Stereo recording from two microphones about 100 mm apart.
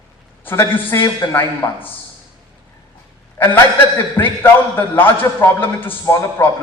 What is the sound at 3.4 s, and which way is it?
A man's voice, 20° left (ahead or behind).